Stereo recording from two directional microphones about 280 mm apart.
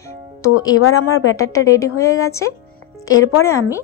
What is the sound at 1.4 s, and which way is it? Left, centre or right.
A woman's voice, centre.